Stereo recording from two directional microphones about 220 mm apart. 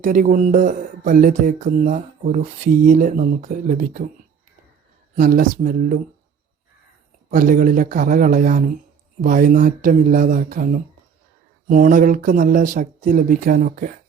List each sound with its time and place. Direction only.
0.0 s speech: 35° right (ahead or behind)
5.1 s speech: 40° right (ahead or behind)
7.3 s speech: 40° right (ahead or behind)